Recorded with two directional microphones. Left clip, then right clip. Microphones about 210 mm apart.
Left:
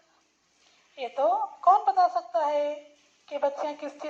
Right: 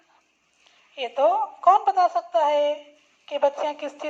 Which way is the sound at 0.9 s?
30° right (ahead or behind).